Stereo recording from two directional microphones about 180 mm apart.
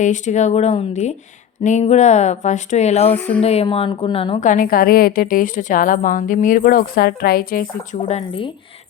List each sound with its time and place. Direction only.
0.0 s speech: 40° left (ahead or behind)
3.1 s speech: 10° left (ahead or behind)
3.4 s speech: 35° left (ahead or behind)
4.4 s a woman's voice: 50° left (ahead or behind)
8.0 s speech: 30° left (ahead or behind)